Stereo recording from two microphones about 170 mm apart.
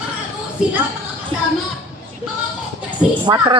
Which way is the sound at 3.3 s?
25° right (ahead or behind).